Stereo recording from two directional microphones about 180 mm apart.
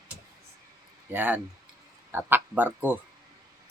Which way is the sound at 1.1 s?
10° right (ahead or behind).